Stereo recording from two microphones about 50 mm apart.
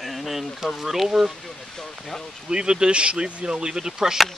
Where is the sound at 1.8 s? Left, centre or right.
Centre.